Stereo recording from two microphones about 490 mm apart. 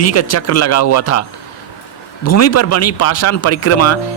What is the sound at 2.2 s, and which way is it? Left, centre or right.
Speech, left.